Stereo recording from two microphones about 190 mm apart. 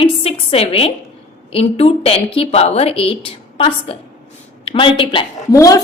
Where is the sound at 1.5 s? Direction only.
30° left (ahead or behind).